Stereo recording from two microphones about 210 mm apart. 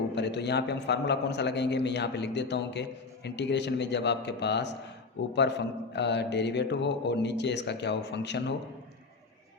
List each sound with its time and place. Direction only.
0.1 s mantra: 55° left (ahead or behind)